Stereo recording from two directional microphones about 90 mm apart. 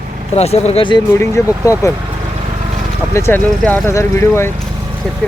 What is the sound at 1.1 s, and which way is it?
Speech, 35° left (ahead or behind).